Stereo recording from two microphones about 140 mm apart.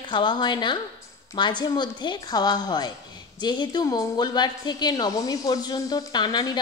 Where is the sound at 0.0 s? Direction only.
35° left (ahead or behind).